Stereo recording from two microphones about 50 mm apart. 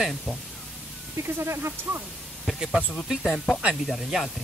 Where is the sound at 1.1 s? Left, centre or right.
Right.